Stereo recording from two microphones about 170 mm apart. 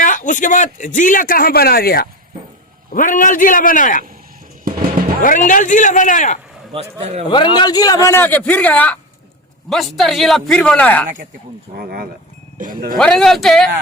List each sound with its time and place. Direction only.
0.0 s speech: 50° left (ahead or behind)
2.9 s speech: 50° left (ahead or behind)
5.2 s speech: 50° left (ahead or behind)
7.0 s a man's voice: 40° right (ahead or behind)
7.3 s a man's voice: 30° left (ahead or behind); by 11.0 s 10° left (ahead or behind)
11.8 s speech: 60° right (ahead or behind)
13.0 s a man's voice: 5° left (ahead or behind)